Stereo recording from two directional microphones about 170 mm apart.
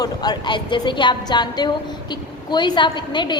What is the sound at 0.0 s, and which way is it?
A woman's voice, 25° left (ahead or behind).